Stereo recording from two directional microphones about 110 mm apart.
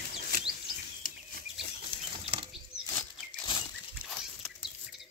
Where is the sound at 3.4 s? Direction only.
40° left (ahead or behind).